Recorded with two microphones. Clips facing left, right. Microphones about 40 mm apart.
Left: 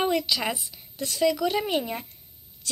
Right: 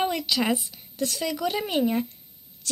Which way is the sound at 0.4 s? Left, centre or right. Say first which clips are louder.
Right 4 dB; right.